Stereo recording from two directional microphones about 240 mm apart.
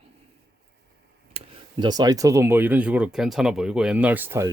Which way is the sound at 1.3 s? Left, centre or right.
Centre.